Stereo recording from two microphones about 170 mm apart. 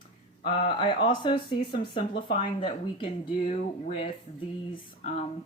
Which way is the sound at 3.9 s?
30° left (ahead or behind).